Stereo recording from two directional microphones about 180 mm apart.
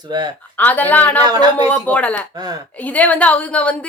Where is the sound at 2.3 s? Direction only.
20° right (ahead or behind).